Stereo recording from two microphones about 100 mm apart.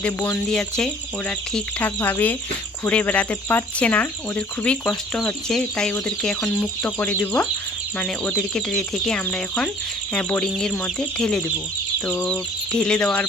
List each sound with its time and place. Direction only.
0.0 s speech: 15° left (ahead or behind)